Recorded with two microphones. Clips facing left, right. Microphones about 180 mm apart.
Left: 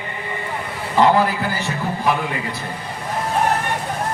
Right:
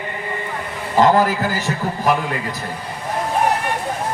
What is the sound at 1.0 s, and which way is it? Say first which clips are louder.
Speech: right 1 dB; 45° right (ahead or behind).